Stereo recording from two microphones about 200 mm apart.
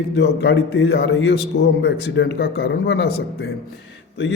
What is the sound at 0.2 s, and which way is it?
A man's voice, 60° left (ahead or behind).